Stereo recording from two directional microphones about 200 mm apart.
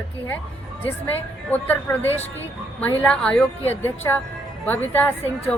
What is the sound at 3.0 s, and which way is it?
Speech, 5° left (ahead or behind).